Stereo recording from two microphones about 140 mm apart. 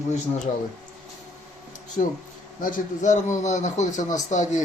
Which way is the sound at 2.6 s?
75° left (ahead or behind).